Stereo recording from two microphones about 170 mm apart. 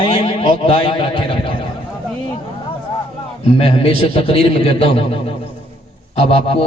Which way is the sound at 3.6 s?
35° left (ahead or behind).